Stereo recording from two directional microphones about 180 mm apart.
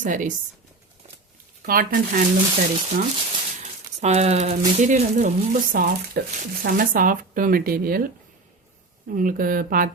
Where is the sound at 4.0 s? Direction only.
40° right (ahead or behind); by 8.1 s 55° right (ahead or behind).